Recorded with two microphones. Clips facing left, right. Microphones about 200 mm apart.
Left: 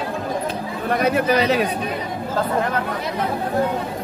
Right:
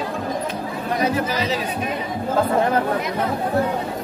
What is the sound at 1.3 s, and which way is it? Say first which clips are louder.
Speech: left 6 dB; 65° left (ahead or behind).